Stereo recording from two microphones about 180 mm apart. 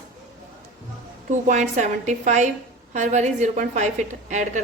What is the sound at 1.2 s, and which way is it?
A woman's voice, 45° right (ahead or behind).